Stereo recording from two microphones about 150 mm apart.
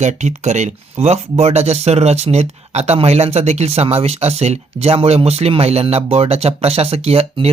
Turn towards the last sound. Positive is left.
turn(degrees=-40)  # may be behind; listen again after turning